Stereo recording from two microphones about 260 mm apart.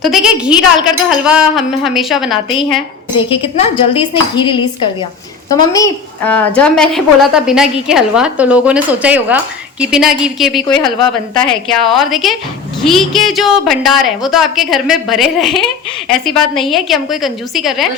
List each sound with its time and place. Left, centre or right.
0.0 s a woman's voice: centre
3.2 s a woman's voice: left; by 17.8 s centre